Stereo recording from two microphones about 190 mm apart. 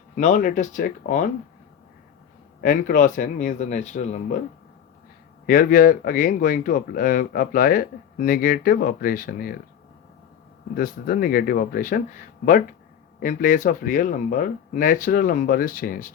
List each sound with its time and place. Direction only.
0.2 s speech: 40° left (ahead or behind)
2.6 s speech: 45° left (ahead or behind)
5.5 s speech: 45° left (ahead or behind)
10.8 s speech: 50° left (ahead or behind)
13.1 s speech: 45° left (ahead or behind)